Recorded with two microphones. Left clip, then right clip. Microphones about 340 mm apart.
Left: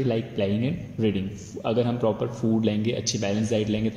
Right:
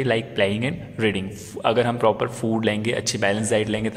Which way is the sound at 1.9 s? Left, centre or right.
Right.